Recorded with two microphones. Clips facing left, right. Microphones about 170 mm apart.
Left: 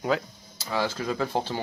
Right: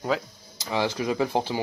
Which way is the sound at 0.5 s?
15° right (ahead or behind).